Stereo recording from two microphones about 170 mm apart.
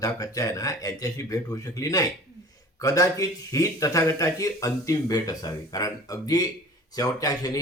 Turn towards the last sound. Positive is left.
turn(degrees=20)  # may be behind; listen again after turning